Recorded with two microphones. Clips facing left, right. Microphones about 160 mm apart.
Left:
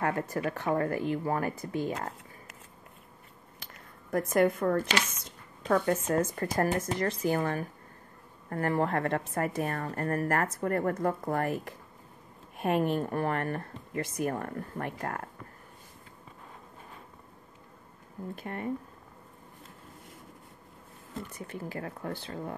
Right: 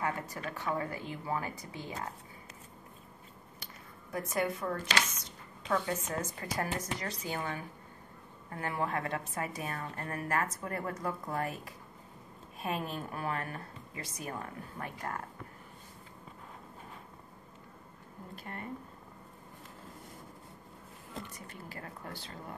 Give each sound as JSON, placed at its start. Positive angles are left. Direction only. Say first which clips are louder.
{"t": 0.0, "sound": "speech", "louder": "left 6 dB", "side_deg": 50}
{"t": 4.1, "sound": "speech", "louder": "left 8 dB", "side_deg": 55}
{"t": 18.3, "sound": "speech", "louder": "left 7 dB", "side_deg": 20}
{"t": 21.6, "sound": "speech", "louder": "left 8 dB", "side_deg": 30}